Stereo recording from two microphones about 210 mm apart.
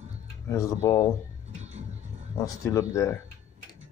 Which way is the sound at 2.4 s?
15° left (ahead or behind).